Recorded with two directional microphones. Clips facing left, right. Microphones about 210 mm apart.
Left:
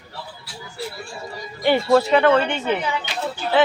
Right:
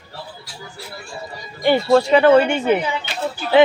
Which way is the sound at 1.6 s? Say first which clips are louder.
Right 2 dB; centre (ahead or behind).